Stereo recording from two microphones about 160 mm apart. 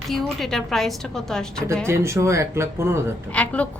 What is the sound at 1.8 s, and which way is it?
Speech, 15° right (ahead or behind).